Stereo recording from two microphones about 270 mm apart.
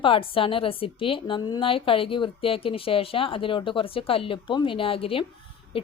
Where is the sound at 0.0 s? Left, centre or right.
Centre.